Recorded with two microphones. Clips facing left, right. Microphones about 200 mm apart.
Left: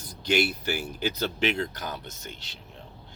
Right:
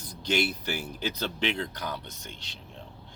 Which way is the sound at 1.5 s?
45° left (ahead or behind).